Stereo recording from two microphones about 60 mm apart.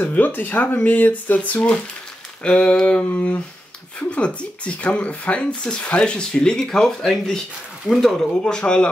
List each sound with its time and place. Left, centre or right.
0.0 s speech: left
2.4 s speech: centre
8.4 s speech: centre